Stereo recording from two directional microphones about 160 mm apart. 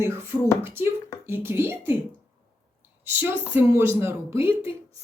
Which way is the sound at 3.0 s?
15° right (ahead or behind).